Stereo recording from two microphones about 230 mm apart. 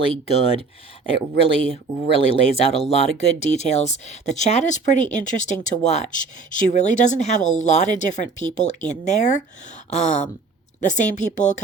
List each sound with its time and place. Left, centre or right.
0.0 s speech: left